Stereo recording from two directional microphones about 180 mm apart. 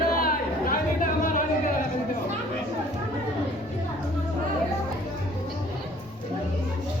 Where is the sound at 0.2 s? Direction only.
50° left (ahead or behind).